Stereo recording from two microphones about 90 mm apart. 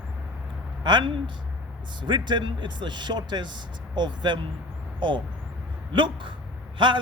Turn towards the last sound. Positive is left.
turn(degrees=-65)  # may be behind; listen again after turning